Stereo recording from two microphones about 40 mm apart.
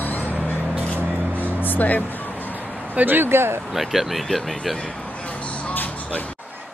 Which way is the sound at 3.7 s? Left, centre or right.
Centre.